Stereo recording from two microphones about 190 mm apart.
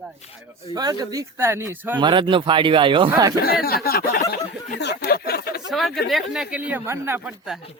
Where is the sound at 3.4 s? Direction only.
55° left (ahead or behind).